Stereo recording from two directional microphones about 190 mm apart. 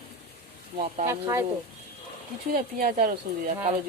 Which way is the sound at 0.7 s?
45° right (ahead or behind).